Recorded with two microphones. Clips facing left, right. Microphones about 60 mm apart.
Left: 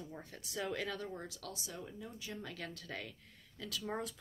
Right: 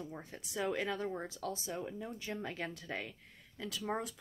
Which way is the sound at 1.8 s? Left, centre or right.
Right.